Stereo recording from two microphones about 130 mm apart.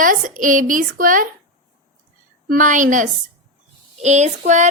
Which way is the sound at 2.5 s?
90° right.